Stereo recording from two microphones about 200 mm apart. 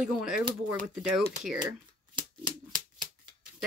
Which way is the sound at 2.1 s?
25° right (ahead or behind).